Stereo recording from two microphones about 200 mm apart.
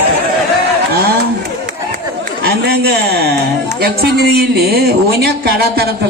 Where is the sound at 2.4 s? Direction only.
55° right (ahead or behind).